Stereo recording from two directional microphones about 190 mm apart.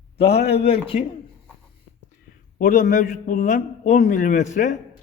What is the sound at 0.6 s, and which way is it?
Speech, 30° left (ahead or behind).